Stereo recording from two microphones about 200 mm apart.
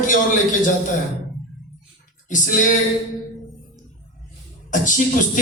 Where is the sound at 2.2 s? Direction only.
40° left (ahead or behind).